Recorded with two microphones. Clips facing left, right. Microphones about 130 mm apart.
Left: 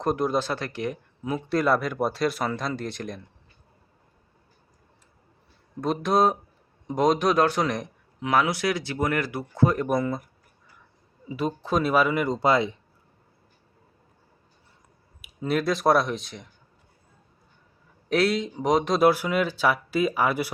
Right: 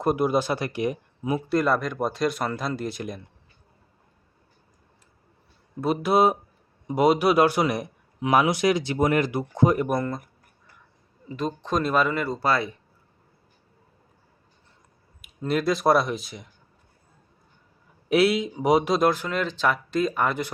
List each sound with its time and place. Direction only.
0.0 s a man's voice: 10° right (ahead or behind)
1.5 s speech: centre (ahead or behind)
5.8 s a man's voice: 5° right (ahead or behind)
9.8 s speech: centre (ahead or behind)
11.3 s speech: 5° left (ahead or behind)
15.2 s speech: centre (ahead or behind)
18.1 s a man's voice: 5° right (ahead or behind)
18.9 s speech: 10° left (ahead or behind)